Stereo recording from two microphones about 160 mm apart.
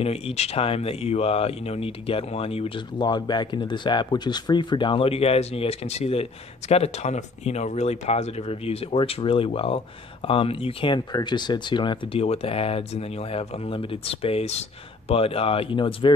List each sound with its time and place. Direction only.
0.0 s speech: 40° left (ahead or behind)